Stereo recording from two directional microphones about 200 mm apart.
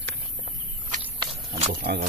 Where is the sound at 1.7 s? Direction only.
50° right (ahead or behind).